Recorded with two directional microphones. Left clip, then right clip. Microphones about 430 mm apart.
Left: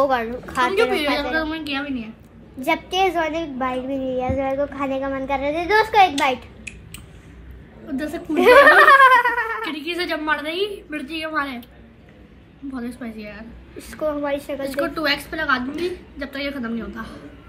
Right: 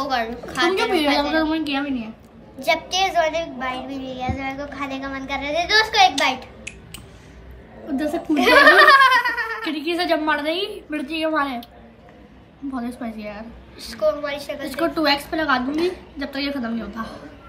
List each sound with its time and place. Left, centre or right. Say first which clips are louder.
0.1 s a child's voice: left 1 dB; centre
0.7 s a woman's voice: even; centre
2.6 s a child's voice: even; centre
7.9 s a woman's voice: right 4 dB; centre
8.5 s a sound: even; centre
9.7 s a woman's voice: right 4 dB; centre
12.8 s a woman's voice: right 2 dB; centre
13.7 s a woman's voice: right 3 dB; centre
14.7 s a woman's voice: right 3 dB; centre